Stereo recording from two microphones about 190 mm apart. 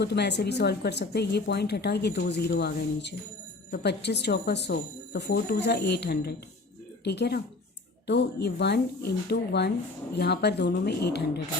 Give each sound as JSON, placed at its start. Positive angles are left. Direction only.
{"t": 0.0, "sound": "speech", "side_deg": 60}